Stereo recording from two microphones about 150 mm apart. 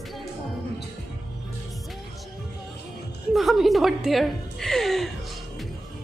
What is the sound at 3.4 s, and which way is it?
A woman's voice, centre (ahead or behind).